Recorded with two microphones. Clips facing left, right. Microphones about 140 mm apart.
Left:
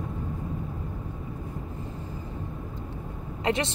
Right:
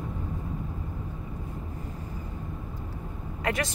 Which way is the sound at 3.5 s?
25° left (ahead or behind).